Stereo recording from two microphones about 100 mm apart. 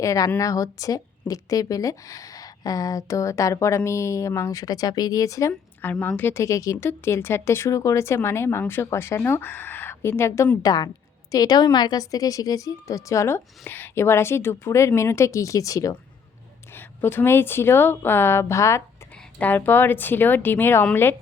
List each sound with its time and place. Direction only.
0.0 s a woman's voice: 35° left (ahead or behind)
5.8 s speech: 20° left (ahead or behind)
10.6 s a woman's voice: 40° left (ahead or behind)
16.7 s speech: 20° left (ahead or behind)
19.4 s speech: 20° left (ahead or behind)